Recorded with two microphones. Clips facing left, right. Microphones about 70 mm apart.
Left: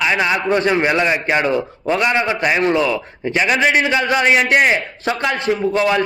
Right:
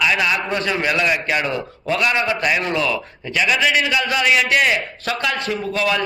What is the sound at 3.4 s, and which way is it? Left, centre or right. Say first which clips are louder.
A man's voice: left 2 dB; left.